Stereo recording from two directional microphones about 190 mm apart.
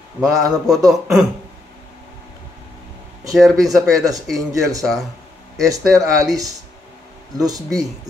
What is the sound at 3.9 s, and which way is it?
Speech, 20° right (ahead or behind).